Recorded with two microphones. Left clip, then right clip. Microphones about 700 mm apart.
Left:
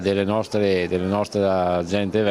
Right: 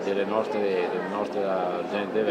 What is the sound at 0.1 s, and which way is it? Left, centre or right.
Speech, left.